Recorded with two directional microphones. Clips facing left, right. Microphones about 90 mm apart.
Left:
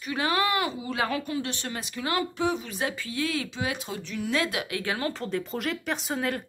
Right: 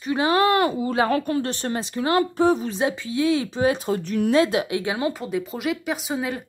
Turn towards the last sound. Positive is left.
turn(degrees=-5)  # may be behind; listen again after turning